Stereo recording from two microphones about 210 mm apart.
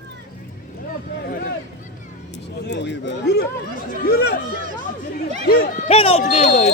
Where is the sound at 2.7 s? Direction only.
55° left (ahead or behind).